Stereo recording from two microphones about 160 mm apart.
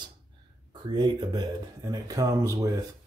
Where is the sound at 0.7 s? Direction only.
25° right (ahead or behind).